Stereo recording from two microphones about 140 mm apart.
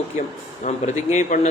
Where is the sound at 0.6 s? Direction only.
65° left (ahead or behind).